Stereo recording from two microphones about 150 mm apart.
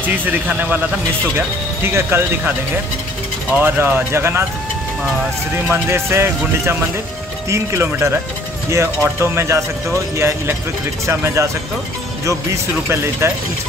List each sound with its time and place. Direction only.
0.0 s speech: 10° right (ahead or behind)
1.8 s speech: 15° right (ahead or behind)
3.5 s speech: 15° right (ahead or behind)
5.7 s speech: 15° right (ahead or behind)
12.9 s speech: 15° right (ahead or behind)